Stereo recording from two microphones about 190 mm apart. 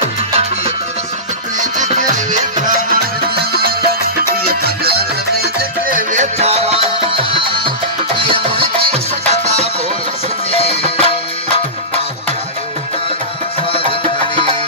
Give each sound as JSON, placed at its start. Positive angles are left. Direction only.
{"t": 2.1, "sound": "music", "side_deg": -45}
{"t": 10.5, "sound": "music", "side_deg": 30}
{"t": 13.7, "sound": "music", "side_deg": 25}